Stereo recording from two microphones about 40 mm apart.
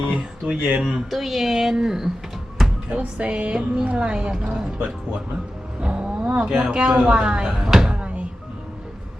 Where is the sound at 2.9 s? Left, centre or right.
Right.